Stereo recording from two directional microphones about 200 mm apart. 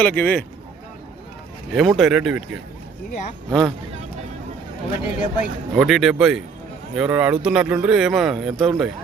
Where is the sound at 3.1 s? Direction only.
35° left (ahead or behind).